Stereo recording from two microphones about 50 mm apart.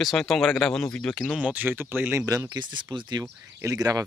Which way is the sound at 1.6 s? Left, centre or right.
Right.